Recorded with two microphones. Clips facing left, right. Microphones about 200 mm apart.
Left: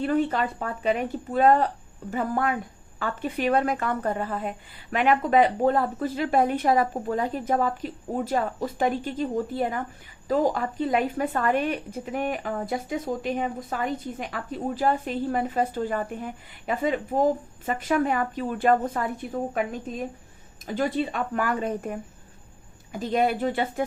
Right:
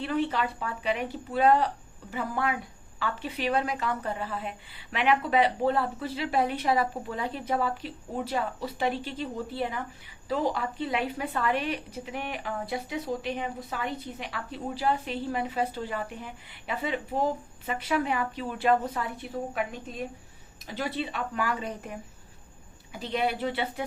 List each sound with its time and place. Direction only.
0.0 s a woman's voice: 45° left (ahead or behind)
20.7 s a woman's voice: 45° left (ahead or behind)